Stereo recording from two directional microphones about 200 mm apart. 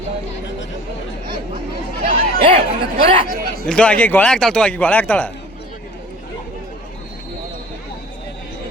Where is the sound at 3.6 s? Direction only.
5° left (ahead or behind).